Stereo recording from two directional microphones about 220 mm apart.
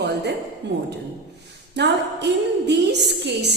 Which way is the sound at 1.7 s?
50° right (ahead or behind).